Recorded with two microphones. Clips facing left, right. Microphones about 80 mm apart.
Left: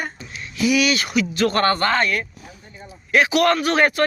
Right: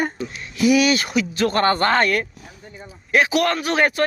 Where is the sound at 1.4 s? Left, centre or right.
Centre.